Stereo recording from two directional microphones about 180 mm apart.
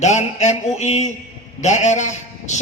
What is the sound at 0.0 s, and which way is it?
Speech, 40° left (ahead or behind).